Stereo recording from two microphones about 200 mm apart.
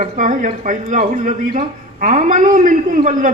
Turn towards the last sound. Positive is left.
turn(degrees=-40)  # may be behind; listen again after turning